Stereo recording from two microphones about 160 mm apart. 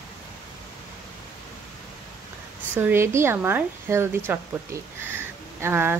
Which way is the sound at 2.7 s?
15° right (ahead or behind).